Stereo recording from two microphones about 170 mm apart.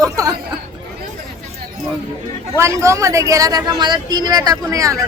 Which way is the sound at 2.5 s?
15° right (ahead or behind).